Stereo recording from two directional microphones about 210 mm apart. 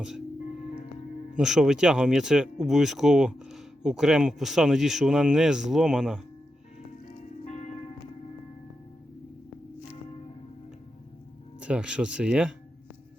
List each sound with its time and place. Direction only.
1.4 s speech: centre (ahead or behind)
7.2 s music: 35° left (ahead or behind)
11.6 s speech: 5° right (ahead or behind)